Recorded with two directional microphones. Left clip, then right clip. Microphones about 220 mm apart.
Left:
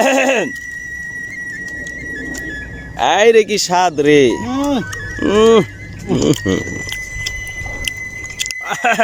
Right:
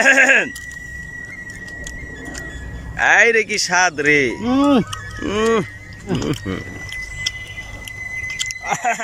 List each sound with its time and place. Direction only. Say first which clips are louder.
0.0 s speech: right 1 dB; 20° left (ahead or behind)
3.0 s speech: left 3 dB; 20° left (ahead or behind)
4.4 s speech: right 3 dB; 5° right (ahead or behind)
5.2 s speech: left 8 dB; 20° left (ahead or behind)
8.4 s a sound: left 6 dB; 40° left (ahead or behind)